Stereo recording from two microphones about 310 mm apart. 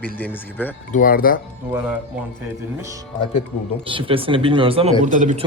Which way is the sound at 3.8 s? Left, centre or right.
Centre.